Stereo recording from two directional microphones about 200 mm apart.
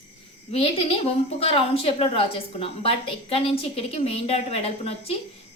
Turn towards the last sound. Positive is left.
turn(degrees=30)  # may be behind; listen again after turning